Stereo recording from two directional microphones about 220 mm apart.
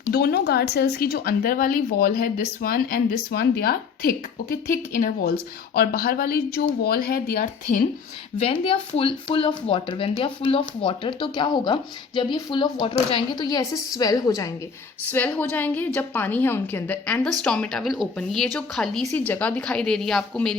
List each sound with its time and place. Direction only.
0.1 s a woman's voice: 45° left (ahead or behind)
8.4 s a woman's voice: 25° left (ahead or behind); by 20.6 s 5° left (ahead or behind)